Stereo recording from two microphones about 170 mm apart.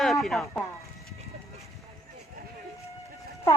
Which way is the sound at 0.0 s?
Centre (ahead or behind).